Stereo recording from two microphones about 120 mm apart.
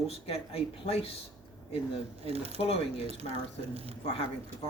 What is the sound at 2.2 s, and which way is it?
Speech, 55° right (ahead or behind).